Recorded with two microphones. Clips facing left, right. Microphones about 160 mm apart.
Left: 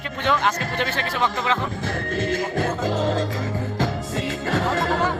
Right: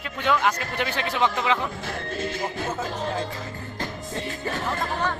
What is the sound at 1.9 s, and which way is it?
Music, 50° left (ahead or behind).